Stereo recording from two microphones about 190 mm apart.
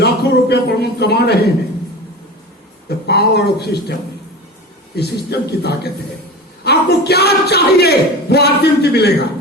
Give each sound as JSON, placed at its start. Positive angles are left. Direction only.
{"t": 0.0, "sound": "a sound", "side_deg": 60}
{"t": 3.1, "sound": "speech", "side_deg": 60}
{"t": 4.9, "sound": "speech", "side_deg": 60}